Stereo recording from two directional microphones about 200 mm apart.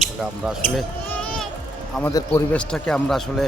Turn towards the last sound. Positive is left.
turn(degrees=0)  # may be behind; listen again after turning